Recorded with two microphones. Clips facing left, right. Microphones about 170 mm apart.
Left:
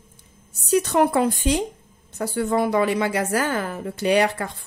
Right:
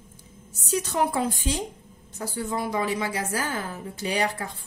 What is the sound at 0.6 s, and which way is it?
A woman's voice, 65° left (ahead or behind).